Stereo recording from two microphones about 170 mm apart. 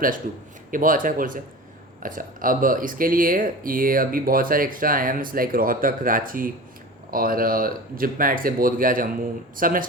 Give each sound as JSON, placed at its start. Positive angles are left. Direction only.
{"t": 0.7, "sound": "speech", "side_deg": -55}